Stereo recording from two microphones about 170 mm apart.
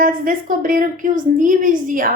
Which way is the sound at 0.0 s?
55° right (ahead or behind).